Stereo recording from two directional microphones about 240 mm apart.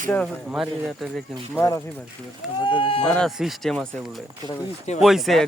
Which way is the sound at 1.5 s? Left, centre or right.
Centre.